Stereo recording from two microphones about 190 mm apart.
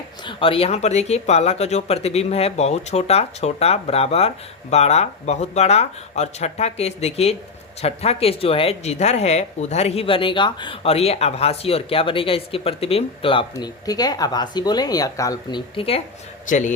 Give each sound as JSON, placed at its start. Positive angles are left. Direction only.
{"t": 0.3, "sound": "speech", "side_deg": 25}
{"t": 16.5, "sound": "speech", "side_deg": 40}